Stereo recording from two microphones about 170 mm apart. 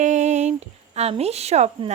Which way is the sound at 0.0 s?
45° right (ahead or behind).